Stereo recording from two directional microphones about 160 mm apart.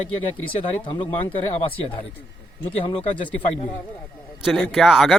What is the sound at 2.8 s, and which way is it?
Speech, 35° left (ahead or behind).